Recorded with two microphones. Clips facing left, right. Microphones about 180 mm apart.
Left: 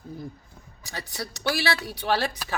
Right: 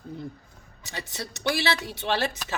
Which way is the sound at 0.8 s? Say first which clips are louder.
Left 1 dB; 25° right (ahead or behind).